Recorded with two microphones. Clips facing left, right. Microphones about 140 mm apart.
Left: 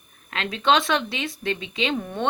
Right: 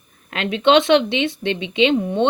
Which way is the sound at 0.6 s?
25° right (ahead or behind).